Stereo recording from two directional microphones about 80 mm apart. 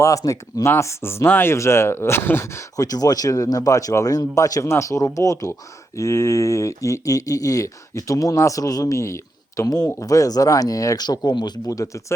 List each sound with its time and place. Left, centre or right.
0.0 s speech: left
2.8 s speech: left
9.6 s speech: left
11.7 s speech: left